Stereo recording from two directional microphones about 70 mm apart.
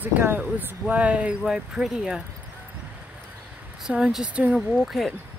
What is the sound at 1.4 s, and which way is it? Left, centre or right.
Speech, centre.